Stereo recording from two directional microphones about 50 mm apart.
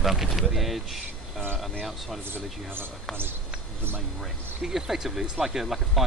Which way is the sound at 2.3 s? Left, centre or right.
Right.